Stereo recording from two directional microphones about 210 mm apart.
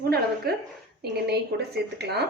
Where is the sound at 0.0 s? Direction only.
50° right (ahead or behind).